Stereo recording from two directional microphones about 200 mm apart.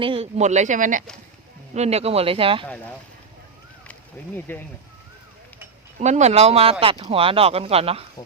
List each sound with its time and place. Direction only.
0.0 s speech: 25° right (ahead or behind)
4.4 s speech: 10° left (ahead or behind)
6.0 s speech: 35° right (ahead or behind)